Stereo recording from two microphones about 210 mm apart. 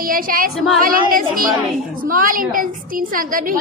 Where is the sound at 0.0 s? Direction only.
40° right (ahead or behind).